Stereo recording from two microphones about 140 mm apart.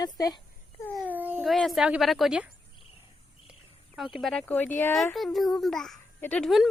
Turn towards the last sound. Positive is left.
turn(degrees=0)  # may be behind; listen again after turning